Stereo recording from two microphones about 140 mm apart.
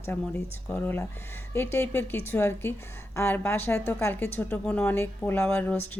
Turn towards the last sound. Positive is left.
turn(degrees=15)  # may be behind; listen again after turning